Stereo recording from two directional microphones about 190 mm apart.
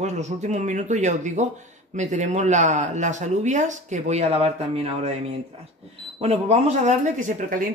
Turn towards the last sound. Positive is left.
turn(degrees=-45)  # may be behind; listen again after turning